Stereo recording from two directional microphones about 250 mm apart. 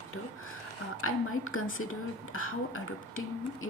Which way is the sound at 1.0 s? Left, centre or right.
Left.